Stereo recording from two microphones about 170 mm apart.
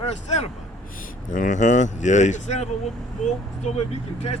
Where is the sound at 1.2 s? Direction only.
50° left (ahead or behind).